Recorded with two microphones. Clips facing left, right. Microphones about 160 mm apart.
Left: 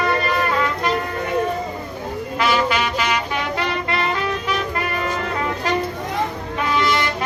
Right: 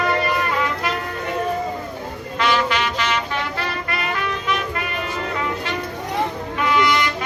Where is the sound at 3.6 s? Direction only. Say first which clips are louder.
Left 4 dB; 25° left (ahead or behind).